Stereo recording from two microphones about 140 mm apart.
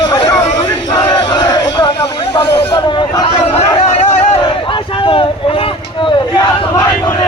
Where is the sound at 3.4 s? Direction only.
45° left (ahead or behind).